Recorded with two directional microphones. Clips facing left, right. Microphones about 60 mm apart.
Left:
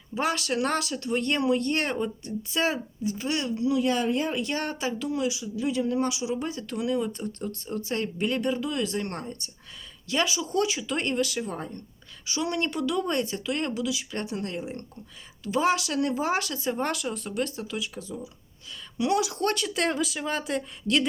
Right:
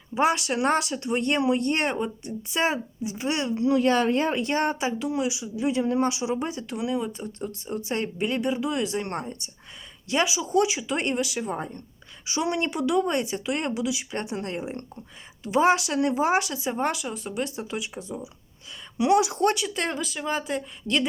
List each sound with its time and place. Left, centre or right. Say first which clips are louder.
0.1 s speech: right 4 dB; right
3.8 s speech: right 5 dB; right
8.2 s speech: right 1 dB; centre
17.6 s speech: right 1 dB; right
19.5 s speech: left 2 dB; centre